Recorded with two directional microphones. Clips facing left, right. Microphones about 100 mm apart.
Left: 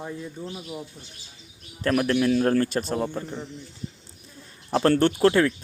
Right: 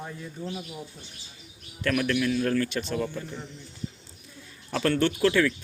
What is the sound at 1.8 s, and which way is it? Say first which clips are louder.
A man's voice: left 4 dB; 35° left (ahead or behind).